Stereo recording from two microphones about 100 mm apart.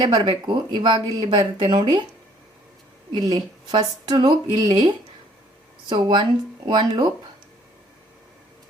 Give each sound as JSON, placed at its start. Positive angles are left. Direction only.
{"t": 0.0, "sound": "speech", "side_deg": -50}
{"t": 3.1, "sound": "speech", "side_deg": -45}